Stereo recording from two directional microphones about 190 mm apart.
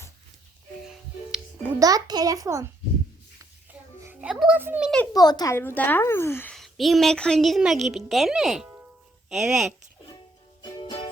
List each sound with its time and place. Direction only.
0.9 s music: 5° right (ahead or behind)
1.8 s a child's voice: 20° right (ahead or behind)
3.7 s music: 10° right (ahead or behind)
5.1 s a woman's voice: 20° left (ahead or behind); by 9.7 s centre (ahead or behind)